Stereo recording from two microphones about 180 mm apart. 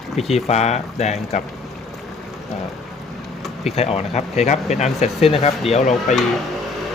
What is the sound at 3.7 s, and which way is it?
Speech, 35° left (ahead or behind).